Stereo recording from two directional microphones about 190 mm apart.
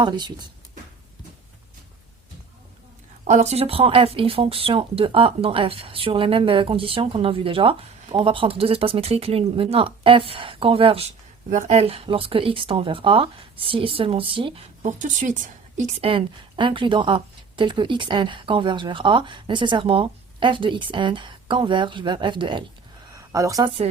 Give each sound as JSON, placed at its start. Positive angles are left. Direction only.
{"t": 0.0, "sound": "speech", "side_deg": -25}
{"t": 3.2, "sound": "speech", "side_deg": -40}
{"t": 14.8, "sound": "speech", "side_deg": -40}